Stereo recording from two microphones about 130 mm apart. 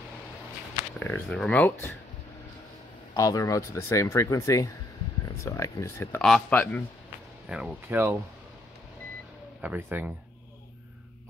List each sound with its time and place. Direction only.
0.9 s speech: 15° left (ahead or behind)
3.2 s speech: 25° left (ahead or behind)
7.4 s speech: 5° right (ahead or behind)
7.9 s speech: 15° right (ahead or behind)
9.6 s speech: 15° right (ahead or behind)